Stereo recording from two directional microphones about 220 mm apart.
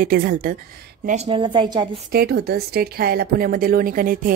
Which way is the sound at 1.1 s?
25° right (ahead or behind).